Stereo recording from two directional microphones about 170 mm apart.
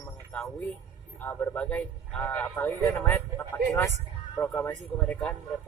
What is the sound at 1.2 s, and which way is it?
A man's voice, 10° left (ahead or behind).